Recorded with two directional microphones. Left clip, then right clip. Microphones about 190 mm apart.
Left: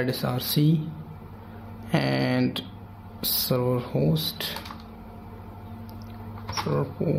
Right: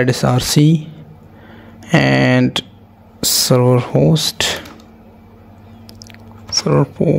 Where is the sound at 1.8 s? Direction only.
50° right (ahead or behind).